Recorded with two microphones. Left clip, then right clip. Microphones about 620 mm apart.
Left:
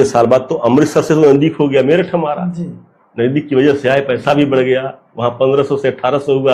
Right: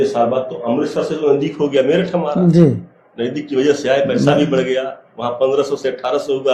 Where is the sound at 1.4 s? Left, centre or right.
Left.